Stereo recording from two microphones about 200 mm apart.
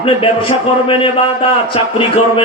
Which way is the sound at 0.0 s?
25° left (ahead or behind).